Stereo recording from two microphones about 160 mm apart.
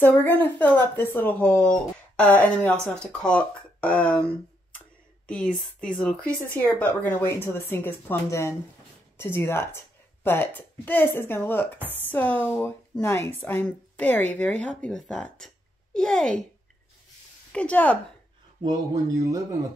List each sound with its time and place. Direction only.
0.0 s speech: 10° left (ahead or behind)
5.2 s a child's voice: 5° left (ahead or behind)
17.5 s a woman's voice: 10° left (ahead or behind)
18.6 s speech: 25° right (ahead or behind)